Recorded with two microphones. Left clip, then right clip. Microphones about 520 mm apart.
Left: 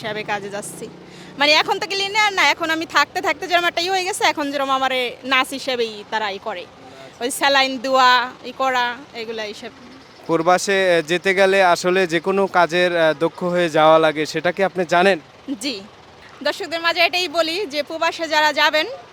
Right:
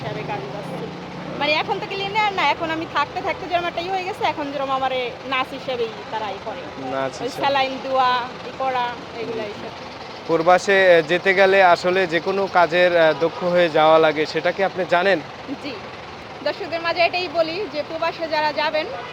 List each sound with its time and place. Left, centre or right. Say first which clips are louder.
0.3 s a woman's voice: left 2 dB; left
7.4 s a woman's voice: left 4 dB; left
10.3 s speech: right 1 dB; centre
16.4 s speech: left 3 dB; left